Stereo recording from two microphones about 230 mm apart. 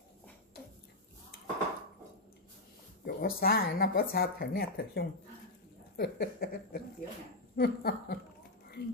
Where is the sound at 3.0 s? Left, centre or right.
Left.